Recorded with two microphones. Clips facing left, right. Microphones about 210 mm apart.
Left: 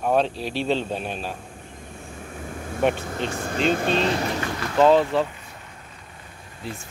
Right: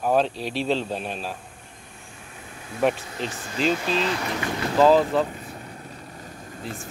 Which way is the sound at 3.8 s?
35° left (ahead or behind).